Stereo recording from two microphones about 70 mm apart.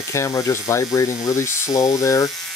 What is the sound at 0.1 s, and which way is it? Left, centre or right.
Speech, left.